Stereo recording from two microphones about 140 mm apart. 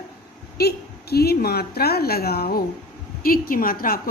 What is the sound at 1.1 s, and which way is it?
A woman's voice, 90° left.